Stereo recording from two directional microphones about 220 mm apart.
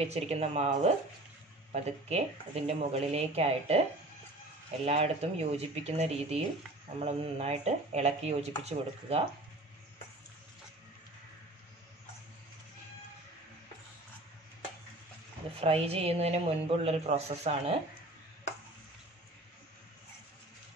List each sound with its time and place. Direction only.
0.0 s speech: 30° right (ahead or behind)
4.8 s speech: 30° right (ahead or behind)
15.6 s speech: 25° right (ahead or behind)